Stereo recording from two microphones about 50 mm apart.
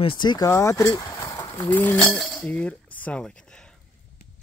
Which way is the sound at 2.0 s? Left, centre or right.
Centre.